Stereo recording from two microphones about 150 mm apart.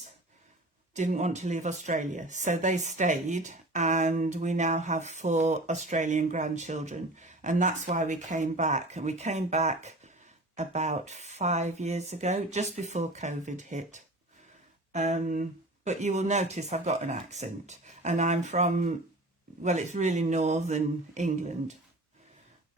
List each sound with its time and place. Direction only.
0.9 s speech: 50° right (ahead or behind)